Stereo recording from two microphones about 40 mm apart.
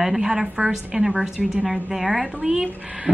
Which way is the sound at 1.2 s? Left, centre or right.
Centre.